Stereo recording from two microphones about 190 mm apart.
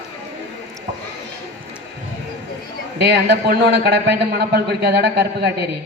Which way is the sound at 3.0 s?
60° right (ahead or behind).